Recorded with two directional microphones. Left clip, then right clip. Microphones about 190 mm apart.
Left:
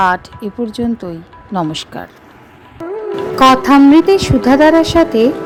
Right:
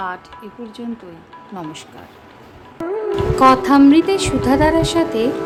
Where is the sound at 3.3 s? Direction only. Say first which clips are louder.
Left 4 dB; 25° left (ahead or behind).